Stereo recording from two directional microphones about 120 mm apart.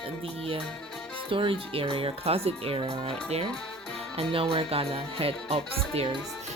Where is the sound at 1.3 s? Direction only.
50° right (ahead or behind).